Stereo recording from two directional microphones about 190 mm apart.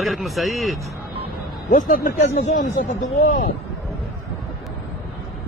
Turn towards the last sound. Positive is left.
turn(degrees=45)  # may be behind; listen again after turning